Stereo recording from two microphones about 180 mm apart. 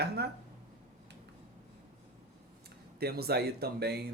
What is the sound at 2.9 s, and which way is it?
Speech, 60° right (ahead or behind).